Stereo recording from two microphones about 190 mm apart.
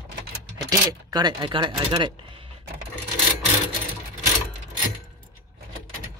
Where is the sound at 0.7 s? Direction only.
20° right (ahead or behind).